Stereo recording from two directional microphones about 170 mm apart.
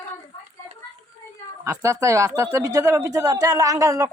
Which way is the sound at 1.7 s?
20° right (ahead or behind).